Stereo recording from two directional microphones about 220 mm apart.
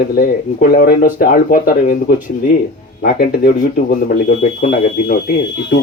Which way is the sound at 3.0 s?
40° left (ahead or behind).